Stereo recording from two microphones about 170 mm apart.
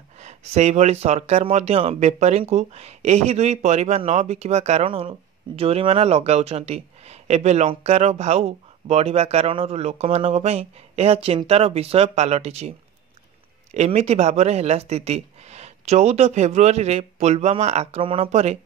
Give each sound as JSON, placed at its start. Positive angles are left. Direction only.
{"t": 0.2, "sound": "speech", "side_deg": -40}